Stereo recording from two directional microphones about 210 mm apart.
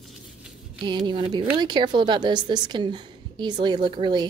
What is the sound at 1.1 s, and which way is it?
Speech, 20° right (ahead or behind).